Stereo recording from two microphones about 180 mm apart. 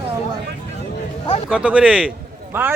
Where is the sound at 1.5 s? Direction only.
5° right (ahead or behind).